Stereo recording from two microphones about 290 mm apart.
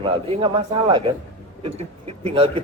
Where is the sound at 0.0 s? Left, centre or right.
Centre.